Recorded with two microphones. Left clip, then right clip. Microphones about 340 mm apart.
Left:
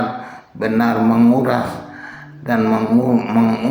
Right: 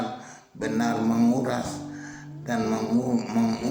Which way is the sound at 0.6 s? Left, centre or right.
Right.